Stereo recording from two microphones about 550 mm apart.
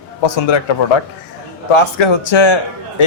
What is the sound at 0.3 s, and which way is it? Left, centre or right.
Speech, left.